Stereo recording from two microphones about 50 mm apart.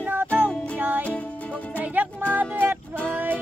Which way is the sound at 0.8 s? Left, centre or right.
Right.